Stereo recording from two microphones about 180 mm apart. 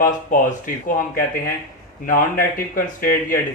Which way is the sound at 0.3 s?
45° left (ahead or behind).